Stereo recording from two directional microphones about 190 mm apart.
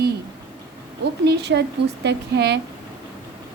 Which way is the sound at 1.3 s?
60° right (ahead or behind).